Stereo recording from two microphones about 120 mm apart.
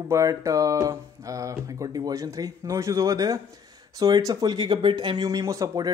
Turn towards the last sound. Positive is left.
turn(degrees=-30)  # may be behind; listen again after turning